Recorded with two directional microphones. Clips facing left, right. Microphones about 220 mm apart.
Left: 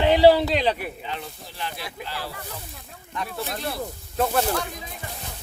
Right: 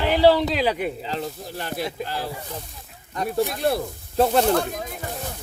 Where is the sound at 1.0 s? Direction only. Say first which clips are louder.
Right 6 dB; 40° right (ahead or behind).